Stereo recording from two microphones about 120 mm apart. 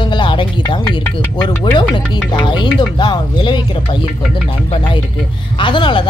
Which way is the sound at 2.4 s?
40° left (ahead or behind).